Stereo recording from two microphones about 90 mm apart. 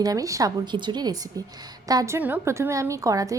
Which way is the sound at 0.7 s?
55° right (ahead or behind).